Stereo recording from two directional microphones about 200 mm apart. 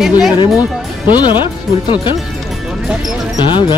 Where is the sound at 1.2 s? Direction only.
25° left (ahead or behind).